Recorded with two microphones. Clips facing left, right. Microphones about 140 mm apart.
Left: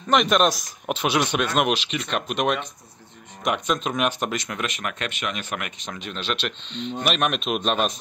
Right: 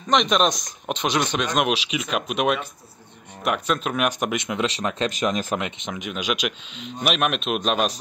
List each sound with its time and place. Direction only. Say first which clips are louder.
0.1 s speech: left 1 dB; 5° left (ahead or behind); by 4.6 s 15° right (ahead or behind)
4.7 s speech: right 6 dB; 30° right (ahead or behind)
5.6 s speech: right 4 dB; 15° right (ahead or behind)